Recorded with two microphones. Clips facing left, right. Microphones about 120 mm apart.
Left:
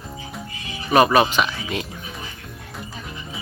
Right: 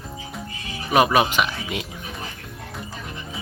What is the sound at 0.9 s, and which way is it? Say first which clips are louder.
Speech: left 2 dB; 10° right (ahead or behind).